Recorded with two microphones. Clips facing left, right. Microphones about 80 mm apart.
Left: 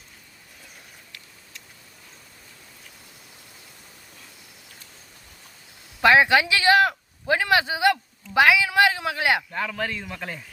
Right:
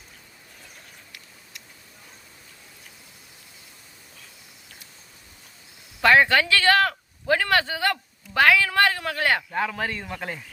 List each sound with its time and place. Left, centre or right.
6.0 s speech: centre
9.5 s speech: centre